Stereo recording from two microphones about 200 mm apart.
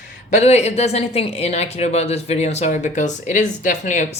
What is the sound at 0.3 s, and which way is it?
Speech, 35° left (ahead or behind).